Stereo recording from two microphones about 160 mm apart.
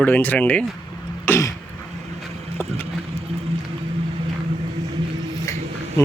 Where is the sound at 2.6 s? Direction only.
10° left (ahead or behind).